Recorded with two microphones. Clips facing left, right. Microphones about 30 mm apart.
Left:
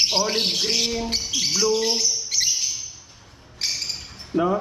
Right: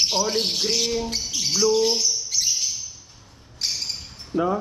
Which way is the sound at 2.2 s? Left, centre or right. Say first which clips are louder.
Left 1 dB; left.